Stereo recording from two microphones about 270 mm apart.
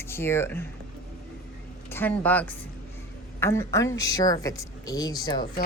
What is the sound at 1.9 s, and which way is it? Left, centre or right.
Speech, centre.